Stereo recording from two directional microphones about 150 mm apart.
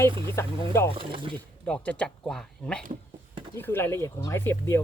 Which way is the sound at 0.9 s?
35° right (ahead or behind).